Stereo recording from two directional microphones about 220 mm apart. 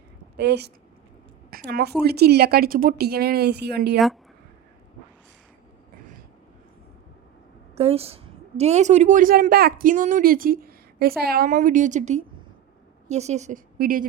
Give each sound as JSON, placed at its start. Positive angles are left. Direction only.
{"t": 0.3, "sound": "speech", "side_deg": -50}
{"t": 3.9, "sound": "speech", "side_deg": 0}
{"t": 7.8, "sound": "a woman's voice", "side_deg": -25}